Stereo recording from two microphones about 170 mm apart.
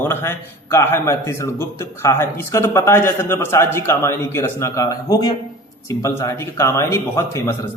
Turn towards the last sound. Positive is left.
turn(degrees=15)  # may be behind; listen again after turning